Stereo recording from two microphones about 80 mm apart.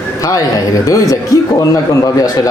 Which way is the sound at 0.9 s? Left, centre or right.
Left.